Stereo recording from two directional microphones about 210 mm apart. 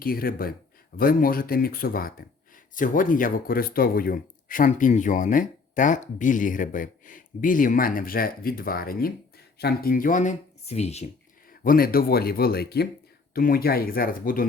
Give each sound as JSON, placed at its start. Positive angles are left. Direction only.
{"t": 0.0, "sound": "speech", "side_deg": 45}
{"t": 11.6, "sound": "speech", "side_deg": 45}